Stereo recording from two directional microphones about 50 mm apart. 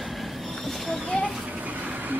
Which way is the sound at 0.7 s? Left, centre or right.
Centre.